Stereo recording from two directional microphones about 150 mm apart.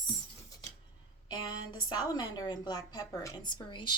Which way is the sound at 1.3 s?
25° left (ahead or behind).